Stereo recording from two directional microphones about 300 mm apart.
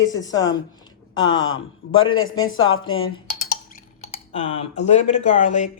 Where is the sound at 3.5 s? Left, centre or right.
Left.